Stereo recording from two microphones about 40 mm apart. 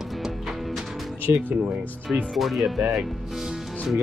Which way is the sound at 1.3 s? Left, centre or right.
Right.